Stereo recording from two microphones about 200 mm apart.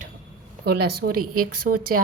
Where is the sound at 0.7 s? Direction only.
50° right (ahead or behind).